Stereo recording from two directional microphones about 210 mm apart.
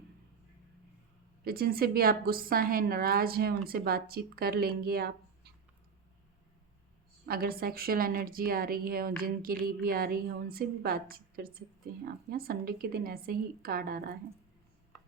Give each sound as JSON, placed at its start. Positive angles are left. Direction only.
{"t": 1.5, "sound": "a woman's voice", "side_deg": -45}
{"t": 7.3, "sound": "a woman's voice", "side_deg": -45}